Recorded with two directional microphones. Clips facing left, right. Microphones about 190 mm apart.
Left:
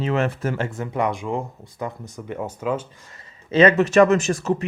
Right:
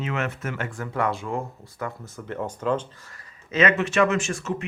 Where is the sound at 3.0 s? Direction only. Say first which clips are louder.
Left 2 dB; 20° left (ahead or behind).